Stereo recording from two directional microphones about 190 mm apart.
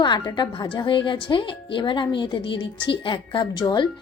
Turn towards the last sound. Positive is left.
turn(degrees=25)  # may be behind; listen again after turning